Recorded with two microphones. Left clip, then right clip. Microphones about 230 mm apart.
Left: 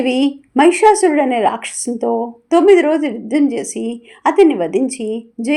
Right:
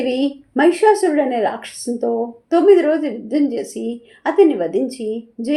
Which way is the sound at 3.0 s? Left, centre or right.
Centre.